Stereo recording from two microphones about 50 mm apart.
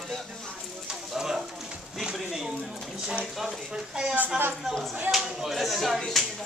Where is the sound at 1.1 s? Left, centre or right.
Centre.